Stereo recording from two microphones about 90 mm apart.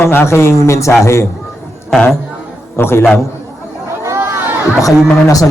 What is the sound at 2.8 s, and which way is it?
Speech, 25° left (ahead or behind).